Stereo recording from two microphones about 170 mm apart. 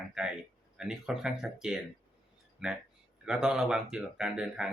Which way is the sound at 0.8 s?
5° right (ahead or behind).